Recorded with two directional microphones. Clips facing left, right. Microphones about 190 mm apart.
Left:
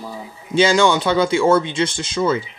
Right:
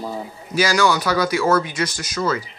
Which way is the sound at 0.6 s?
25° left (ahead or behind).